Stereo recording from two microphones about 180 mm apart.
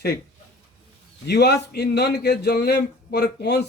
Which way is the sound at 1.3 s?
65° left (ahead or behind).